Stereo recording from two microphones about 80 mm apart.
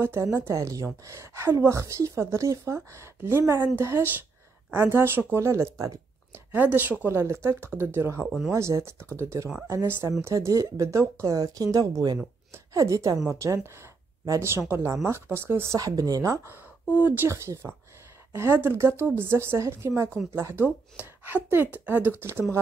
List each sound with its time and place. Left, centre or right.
0.0 s a woman's voice: right
6.3 s a woman's voice: right
10.2 s speech: right
12.7 s a woman's voice: right
14.7 s a woman's voice: right
15.8 s speech: right
16.4 s speech: right
17.3 s a woman's voice: right